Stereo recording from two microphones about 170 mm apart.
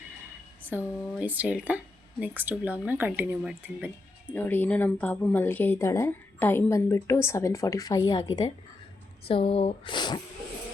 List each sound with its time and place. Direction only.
0.7 s speech: 10° right (ahead or behind)
3.8 s speech: 5° left (ahead or behind); by 8.2 s 20° left (ahead or behind)
9.2 s speech: 35° left (ahead or behind)